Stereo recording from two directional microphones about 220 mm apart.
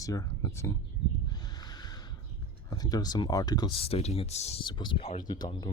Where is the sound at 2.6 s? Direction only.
15° left (ahead or behind).